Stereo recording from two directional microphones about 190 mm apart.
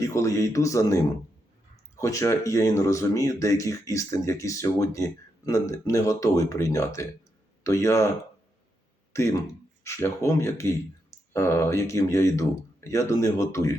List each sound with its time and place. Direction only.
0.0 s speech: 15° left (ahead or behind)
9.1 s speech: 15° left (ahead or behind)